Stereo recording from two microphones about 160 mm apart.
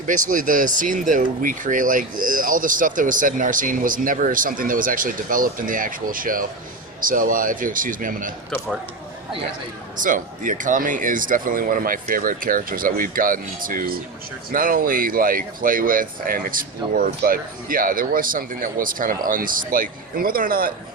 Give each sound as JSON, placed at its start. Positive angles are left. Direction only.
{"t": 0.1, "sound": "speech", "side_deg": -55}
{"t": 10.0, "sound": "speech", "side_deg": -55}